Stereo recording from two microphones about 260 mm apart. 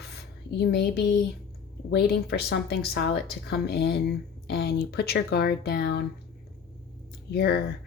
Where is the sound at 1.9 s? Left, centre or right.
Left.